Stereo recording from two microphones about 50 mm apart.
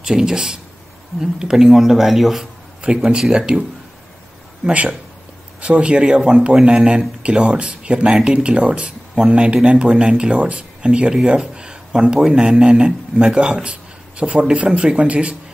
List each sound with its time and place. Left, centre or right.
0.0 s speech: centre
3.1 s speech: centre
4.6 s speech: right